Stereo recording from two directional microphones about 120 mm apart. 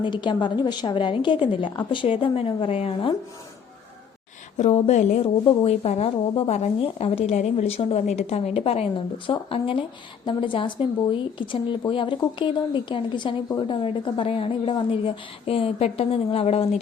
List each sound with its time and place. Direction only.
0.0 s a woman's voice: 40° left (ahead or behind)
4.5 s a woman's voice: 70° left (ahead or behind); by 16.6 s 55° left (ahead or behind)